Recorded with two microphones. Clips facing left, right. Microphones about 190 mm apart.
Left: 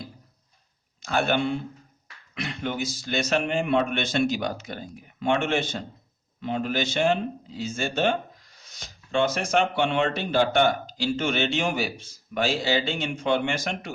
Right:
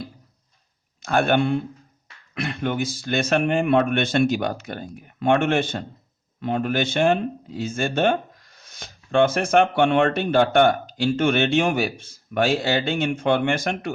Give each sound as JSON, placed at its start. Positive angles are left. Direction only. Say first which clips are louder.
{"t": 1.0, "sound": "a man's voice", "louder": "right 4 dB", "side_deg": -55}